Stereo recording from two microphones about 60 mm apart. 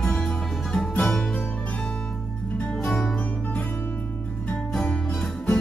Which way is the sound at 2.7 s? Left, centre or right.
Centre.